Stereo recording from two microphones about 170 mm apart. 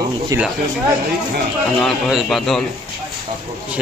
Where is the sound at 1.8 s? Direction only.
Centre (ahead or behind).